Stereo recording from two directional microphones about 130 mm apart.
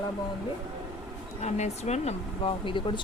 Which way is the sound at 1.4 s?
60° left (ahead or behind).